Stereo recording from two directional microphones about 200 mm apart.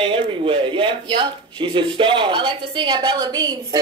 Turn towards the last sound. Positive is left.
turn(degrees=-20)  # may be behind; listen again after turning